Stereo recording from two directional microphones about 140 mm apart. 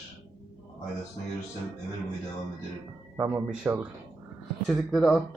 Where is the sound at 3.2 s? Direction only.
15° right (ahead or behind).